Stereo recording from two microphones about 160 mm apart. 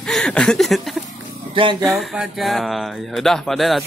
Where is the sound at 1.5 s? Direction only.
30° right (ahead or behind).